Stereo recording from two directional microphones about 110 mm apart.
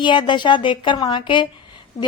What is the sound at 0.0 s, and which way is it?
A woman's voice, 45° left (ahead or behind).